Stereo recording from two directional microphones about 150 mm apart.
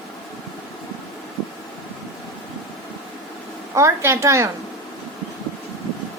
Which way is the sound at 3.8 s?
20° right (ahead or behind).